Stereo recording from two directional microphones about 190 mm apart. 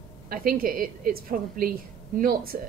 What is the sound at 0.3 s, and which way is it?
A woman's voice, 50° right (ahead or behind).